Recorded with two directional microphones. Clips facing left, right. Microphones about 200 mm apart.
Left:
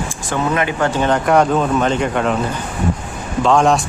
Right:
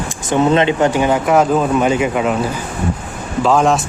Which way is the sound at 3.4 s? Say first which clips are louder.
Even; 5° right (ahead or behind).